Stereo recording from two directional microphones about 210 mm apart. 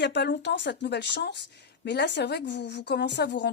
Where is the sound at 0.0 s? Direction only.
55° left (ahead or behind).